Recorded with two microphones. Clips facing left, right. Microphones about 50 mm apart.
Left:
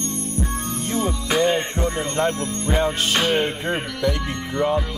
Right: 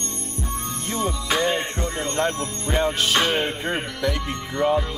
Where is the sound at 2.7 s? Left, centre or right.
Centre.